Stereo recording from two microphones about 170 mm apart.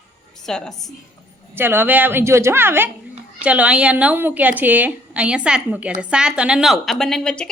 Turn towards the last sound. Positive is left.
turn(degrees=5)  # may be behind; listen again after turning